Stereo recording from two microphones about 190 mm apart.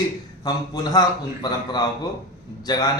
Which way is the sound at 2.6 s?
20° left (ahead or behind).